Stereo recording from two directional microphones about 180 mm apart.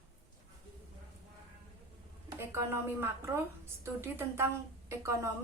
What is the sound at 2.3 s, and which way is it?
A woman's voice, 15° right (ahead or behind).